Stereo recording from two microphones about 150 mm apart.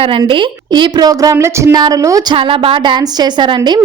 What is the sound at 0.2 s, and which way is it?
A woman's voice, 35° right (ahead or behind).